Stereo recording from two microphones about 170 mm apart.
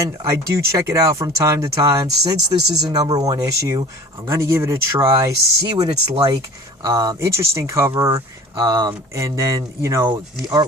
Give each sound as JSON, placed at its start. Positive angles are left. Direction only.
{"t": 0.0, "sound": "speech", "side_deg": -20}